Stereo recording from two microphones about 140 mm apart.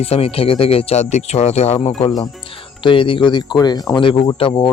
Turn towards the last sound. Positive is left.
turn(degrees=35)  # may be behind; listen again after turning